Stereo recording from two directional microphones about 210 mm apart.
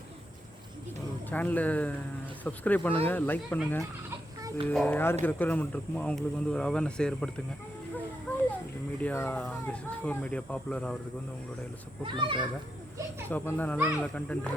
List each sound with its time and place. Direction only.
1.3 s speech: 10° left (ahead or behind)
4.4 s babbling: 15° right (ahead or behind)
4.7 s speech: 5° left (ahead or behind)
9.0 s speech: 10° left (ahead or behind)
12.0 s speech: 25° right (ahead or behind)
13.2 s speech: 10° left (ahead or behind)